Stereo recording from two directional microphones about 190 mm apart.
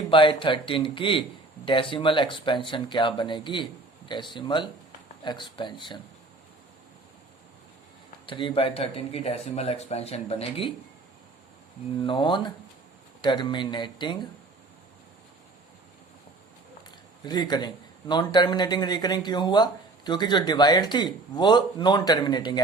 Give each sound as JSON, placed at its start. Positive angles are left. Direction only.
{"t": 0.1, "sound": "speech", "side_deg": 25}
{"t": 8.3, "sound": "speech", "side_deg": 25}
{"t": 12.0, "sound": "speech", "side_deg": 25}
{"t": 17.2, "sound": "speech", "side_deg": 20}